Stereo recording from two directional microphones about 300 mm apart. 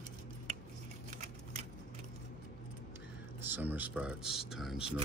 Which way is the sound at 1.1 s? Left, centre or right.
Right.